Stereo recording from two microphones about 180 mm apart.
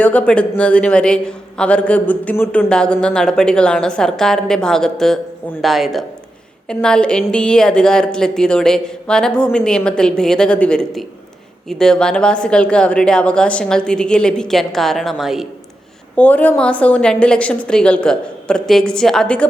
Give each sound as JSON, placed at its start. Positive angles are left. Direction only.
{"t": 0.0, "sound": "a man's voice", "side_deg": 5}